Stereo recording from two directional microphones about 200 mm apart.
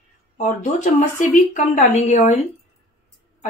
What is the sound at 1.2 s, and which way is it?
Speech, 35° left (ahead or behind).